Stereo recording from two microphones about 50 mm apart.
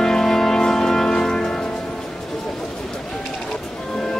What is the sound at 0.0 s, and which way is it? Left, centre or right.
Music, centre.